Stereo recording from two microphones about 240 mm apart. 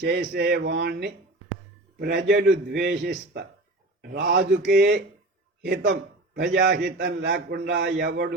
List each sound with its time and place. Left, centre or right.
0.0 s a man's voice: right
2.0 s a man's voice: right